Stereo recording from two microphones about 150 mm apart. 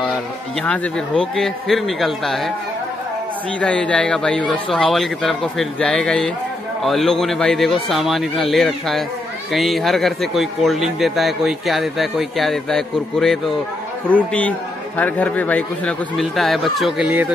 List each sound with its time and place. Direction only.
0.6 s a man's voice: 5° left (ahead or behind)
3.6 s a man's voice: 5° left (ahead or behind)